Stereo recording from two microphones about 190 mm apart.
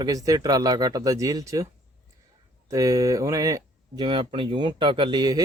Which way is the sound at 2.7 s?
15° right (ahead or behind).